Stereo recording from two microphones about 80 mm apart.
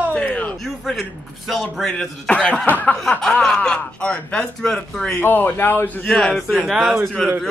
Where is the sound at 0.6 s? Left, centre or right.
Centre.